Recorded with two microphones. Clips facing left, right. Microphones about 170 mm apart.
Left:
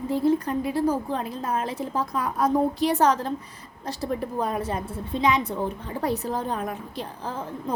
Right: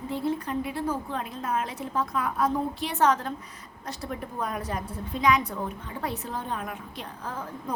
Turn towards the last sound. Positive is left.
turn(degrees=30)  # may be behind; listen again after turning